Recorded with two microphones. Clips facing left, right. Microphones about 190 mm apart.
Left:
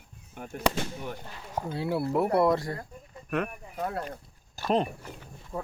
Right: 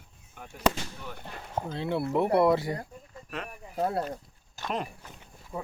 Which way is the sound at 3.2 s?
55° left (ahead or behind).